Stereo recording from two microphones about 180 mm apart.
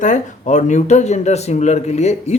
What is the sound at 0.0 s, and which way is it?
Speech, 40° left (ahead or behind).